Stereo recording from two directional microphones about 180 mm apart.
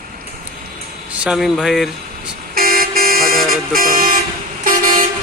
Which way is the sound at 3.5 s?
55° right (ahead or behind).